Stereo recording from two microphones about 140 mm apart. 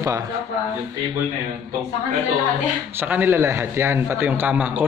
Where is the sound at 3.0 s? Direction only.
15° right (ahead or behind).